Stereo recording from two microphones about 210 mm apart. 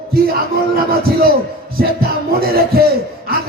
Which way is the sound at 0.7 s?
45° right (ahead or behind).